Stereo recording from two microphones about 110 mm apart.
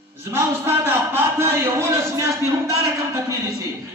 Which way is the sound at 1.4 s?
25° right (ahead or behind).